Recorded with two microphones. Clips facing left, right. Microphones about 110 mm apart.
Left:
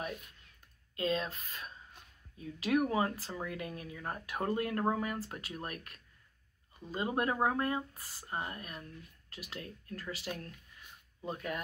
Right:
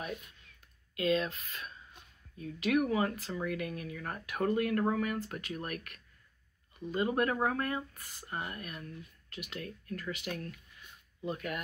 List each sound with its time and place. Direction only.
0.9 s speech: 30° left (ahead or behind)